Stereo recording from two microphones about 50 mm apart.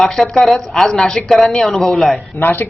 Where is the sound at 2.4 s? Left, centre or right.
Left.